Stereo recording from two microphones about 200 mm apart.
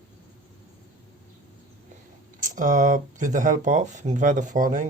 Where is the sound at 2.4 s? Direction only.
40° right (ahead or behind).